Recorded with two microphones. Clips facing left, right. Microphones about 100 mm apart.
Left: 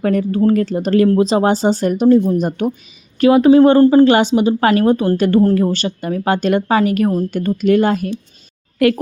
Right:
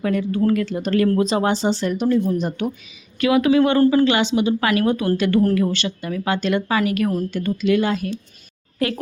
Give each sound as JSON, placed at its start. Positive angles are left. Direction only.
{"t": 0.0, "sound": "speech", "side_deg": 40}
{"t": 2.0, "sound": "speech", "side_deg": 30}
{"t": 2.3, "sound": "speech", "side_deg": 45}
{"t": 7.3, "sound": "speech", "side_deg": 50}
{"t": 8.8, "sound": "a woman's voice", "side_deg": 55}